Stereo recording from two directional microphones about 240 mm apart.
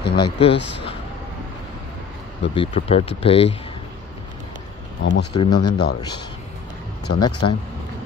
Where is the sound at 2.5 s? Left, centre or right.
Left.